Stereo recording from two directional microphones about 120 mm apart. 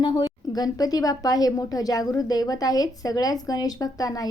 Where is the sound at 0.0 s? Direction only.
40° left (ahead or behind).